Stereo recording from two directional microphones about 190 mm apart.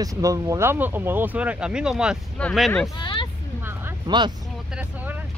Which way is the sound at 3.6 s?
10° right (ahead or behind).